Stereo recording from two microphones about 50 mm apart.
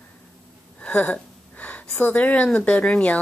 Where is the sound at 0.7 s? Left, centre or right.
Left.